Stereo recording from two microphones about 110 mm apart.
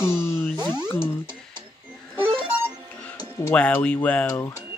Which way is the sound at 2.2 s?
15° right (ahead or behind).